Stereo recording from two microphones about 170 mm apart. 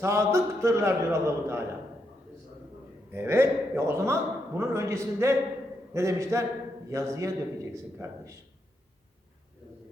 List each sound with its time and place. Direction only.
0.0 s a man's voice: 15° right (ahead or behind)
3.1 s a man's voice: 15° right (ahead or behind)